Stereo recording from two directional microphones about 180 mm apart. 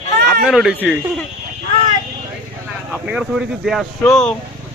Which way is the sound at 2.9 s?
5° right (ahead or behind).